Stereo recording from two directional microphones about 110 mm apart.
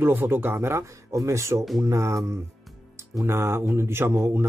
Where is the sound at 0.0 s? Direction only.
20° right (ahead or behind).